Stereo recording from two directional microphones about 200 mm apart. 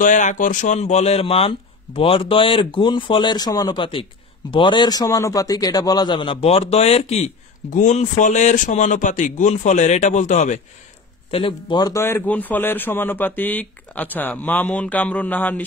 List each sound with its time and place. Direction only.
0.0 s a man's voice: 40° left (ahead or behind); by 15.6 s 10° left (ahead or behind)